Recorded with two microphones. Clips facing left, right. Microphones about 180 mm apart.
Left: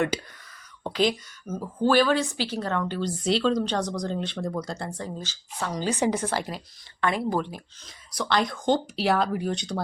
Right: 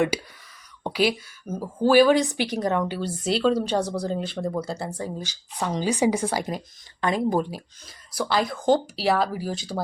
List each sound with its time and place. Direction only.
0.1 s speech: 10° right (ahead or behind)
7.5 s speech: 5° right (ahead or behind)